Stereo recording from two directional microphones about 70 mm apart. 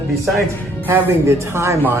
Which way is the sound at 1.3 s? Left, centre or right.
Right.